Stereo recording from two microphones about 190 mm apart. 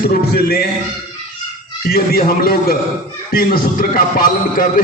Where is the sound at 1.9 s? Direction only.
50° left (ahead or behind).